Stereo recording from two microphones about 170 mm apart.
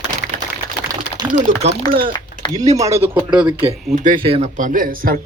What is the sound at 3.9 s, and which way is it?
Speech, 50° right (ahead or behind).